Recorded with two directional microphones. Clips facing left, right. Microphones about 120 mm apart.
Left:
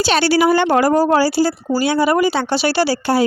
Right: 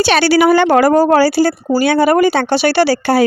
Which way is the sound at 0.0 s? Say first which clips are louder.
Right 3 dB; 75° right (ahead or behind).